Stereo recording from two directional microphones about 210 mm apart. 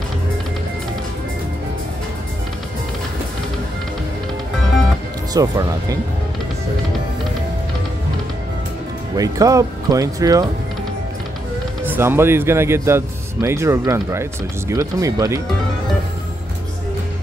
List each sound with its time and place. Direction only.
5.3 s speech: 15° right (ahead or behind)
9.1 s speech: 15° right (ahead or behind)
11.8 s speech: 10° right (ahead or behind)